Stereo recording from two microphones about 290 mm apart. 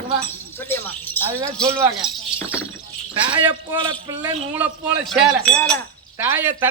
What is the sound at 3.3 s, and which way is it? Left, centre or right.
Speech, centre.